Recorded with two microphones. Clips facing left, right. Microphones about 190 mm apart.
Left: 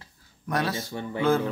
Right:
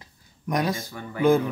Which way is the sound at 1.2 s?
15° right (ahead or behind).